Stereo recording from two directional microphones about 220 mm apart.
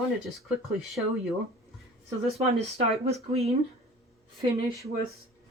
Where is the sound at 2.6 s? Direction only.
30° right (ahead or behind).